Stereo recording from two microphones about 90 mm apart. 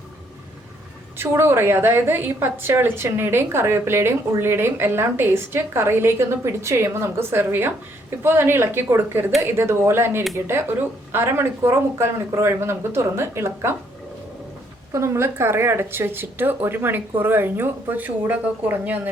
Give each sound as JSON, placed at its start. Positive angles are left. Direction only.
{"t": 1.1, "sound": "a woman's voice", "side_deg": -30}
{"t": 14.9, "sound": "a woman's voice", "side_deg": -30}